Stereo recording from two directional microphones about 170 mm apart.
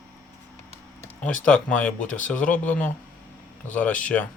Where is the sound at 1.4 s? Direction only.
10° left (ahead or behind).